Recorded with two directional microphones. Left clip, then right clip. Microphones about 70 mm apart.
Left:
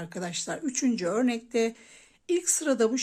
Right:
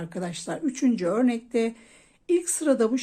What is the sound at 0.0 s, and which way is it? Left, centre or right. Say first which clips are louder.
A woman's voice: right 1 dB; left.